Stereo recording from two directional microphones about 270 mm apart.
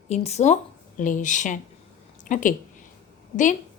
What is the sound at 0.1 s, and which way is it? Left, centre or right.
A woman's voice, left.